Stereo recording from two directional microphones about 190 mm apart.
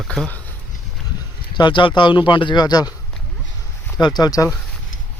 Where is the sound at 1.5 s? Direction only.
25° left (ahead or behind).